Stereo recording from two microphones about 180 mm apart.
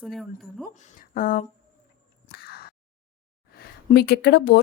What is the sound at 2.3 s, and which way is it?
Biting, 60° left (ahead or behind).